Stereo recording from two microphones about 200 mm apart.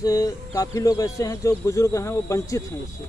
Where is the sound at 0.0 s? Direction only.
20° left (ahead or behind).